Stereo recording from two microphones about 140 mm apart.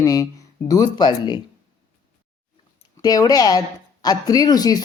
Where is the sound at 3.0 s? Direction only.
25° left (ahead or behind).